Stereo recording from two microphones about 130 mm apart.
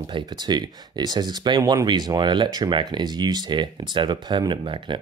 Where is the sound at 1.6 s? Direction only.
25° right (ahead or behind).